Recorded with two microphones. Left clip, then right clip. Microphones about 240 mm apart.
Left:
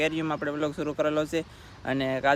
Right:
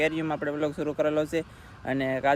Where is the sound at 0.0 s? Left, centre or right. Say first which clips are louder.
Right 1 dB; centre.